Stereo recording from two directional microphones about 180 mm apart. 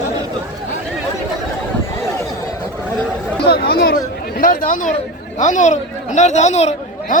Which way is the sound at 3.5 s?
60° left (ahead or behind).